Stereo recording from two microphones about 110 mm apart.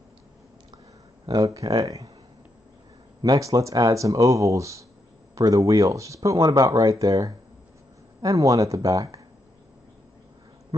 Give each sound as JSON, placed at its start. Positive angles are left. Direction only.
{"t": 1.2, "sound": "speech", "side_deg": -35}
{"t": 3.3, "sound": "speech", "side_deg": -30}